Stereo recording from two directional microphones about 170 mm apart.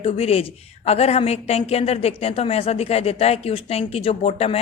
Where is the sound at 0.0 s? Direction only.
35° left (ahead or behind).